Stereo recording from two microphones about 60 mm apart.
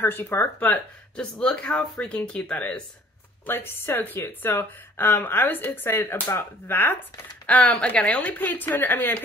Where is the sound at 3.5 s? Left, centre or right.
Left.